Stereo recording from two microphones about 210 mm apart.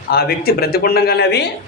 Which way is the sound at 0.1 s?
45° left (ahead or behind).